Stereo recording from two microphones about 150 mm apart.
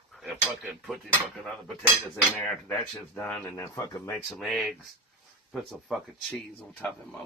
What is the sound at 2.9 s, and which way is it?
Speech, 5° left (ahead or behind).